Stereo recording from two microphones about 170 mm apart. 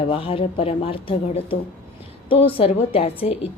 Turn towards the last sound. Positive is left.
turn(degrees=35)  # may be behind; listen again after turning